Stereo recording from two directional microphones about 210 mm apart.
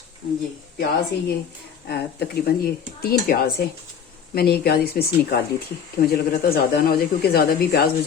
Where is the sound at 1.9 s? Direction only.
50° left (ahead or behind).